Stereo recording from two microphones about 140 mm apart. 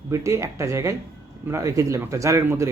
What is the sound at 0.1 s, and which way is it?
A man's voice, 20° right (ahead or behind).